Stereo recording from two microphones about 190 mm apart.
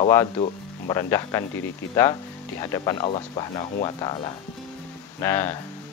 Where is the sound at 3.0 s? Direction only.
25° left (ahead or behind).